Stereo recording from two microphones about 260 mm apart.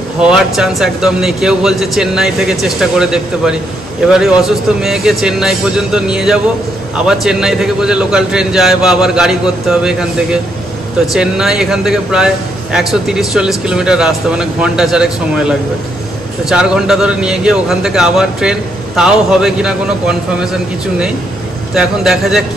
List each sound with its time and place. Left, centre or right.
0.2 s a man's voice: centre